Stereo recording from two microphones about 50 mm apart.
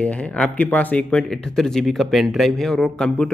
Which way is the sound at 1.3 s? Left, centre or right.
Centre.